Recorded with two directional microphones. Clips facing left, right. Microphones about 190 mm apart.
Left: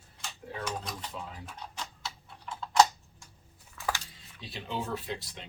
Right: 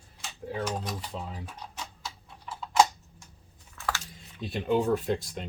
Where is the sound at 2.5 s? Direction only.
5° right (ahead or behind).